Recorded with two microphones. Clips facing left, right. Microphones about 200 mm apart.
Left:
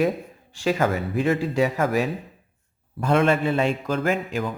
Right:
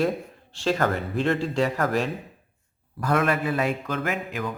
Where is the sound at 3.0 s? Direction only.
25° left (ahead or behind).